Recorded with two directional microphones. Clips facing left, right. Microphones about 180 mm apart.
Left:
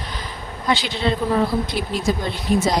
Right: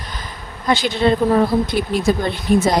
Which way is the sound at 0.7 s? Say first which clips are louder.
Right 5 dB; 45° right (ahead or behind).